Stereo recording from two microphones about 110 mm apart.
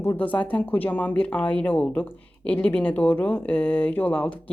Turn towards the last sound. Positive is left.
turn(degrees=15)  # may be behind; listen again after turning